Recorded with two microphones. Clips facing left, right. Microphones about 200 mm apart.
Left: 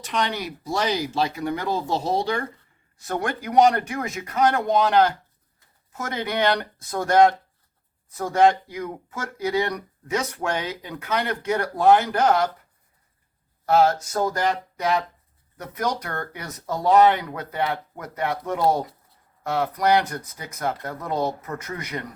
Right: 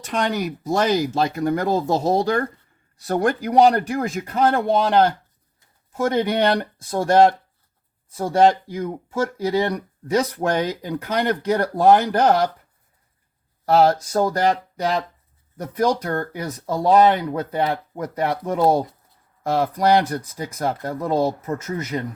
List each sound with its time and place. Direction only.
0.0 s speech: 45° right (ahead or behind)
13.7 s speech: 35° right (ahead or behind)